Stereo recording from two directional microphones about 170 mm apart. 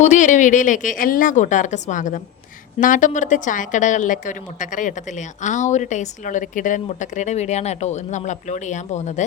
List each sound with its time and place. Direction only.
0.0 s a woman's voice: 45° left (ahead or behind)